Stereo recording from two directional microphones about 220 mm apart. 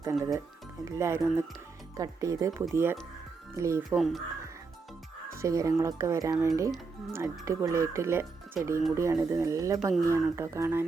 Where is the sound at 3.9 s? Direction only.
Centre (ahead or behind).